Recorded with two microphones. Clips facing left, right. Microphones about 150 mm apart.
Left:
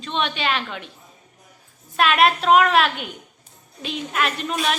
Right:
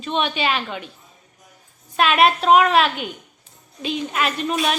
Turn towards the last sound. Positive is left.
turn(degrees=0)  # may be behind; listen again after turning